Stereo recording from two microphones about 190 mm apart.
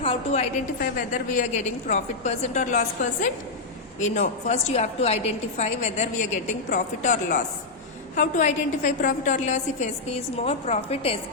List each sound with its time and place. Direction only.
0.0 s a woman's voice: 30° left (ahead or behind)